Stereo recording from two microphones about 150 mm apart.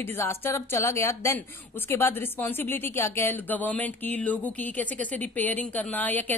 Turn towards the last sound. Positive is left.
turn(degrees=10)  # may be behind; listen again after turning